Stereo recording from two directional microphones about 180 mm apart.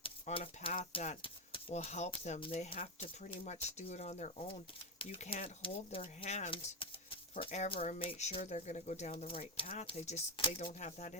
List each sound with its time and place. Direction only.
0.0 s speech: 30° left (ahead or behind)